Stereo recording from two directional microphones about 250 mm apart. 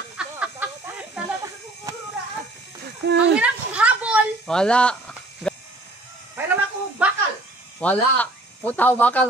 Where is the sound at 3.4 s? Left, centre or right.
Centre.